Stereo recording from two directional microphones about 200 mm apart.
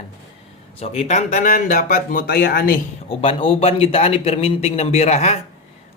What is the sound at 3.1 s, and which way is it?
A man's voice, 30° left (ahead or behind).